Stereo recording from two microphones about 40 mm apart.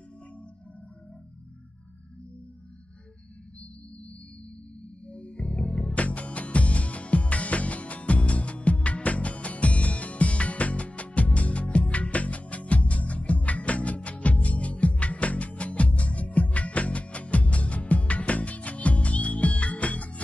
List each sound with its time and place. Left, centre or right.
5.0 s music: left